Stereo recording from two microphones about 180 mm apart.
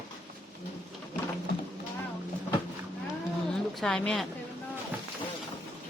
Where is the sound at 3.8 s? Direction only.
5° left (ahead or behind).